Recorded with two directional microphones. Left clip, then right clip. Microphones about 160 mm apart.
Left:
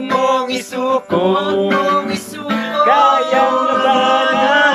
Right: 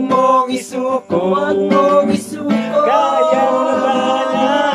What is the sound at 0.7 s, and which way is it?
Music, centre (ahead or behind).